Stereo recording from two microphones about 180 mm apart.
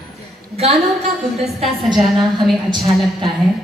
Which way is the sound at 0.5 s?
35° right (ahead or behind).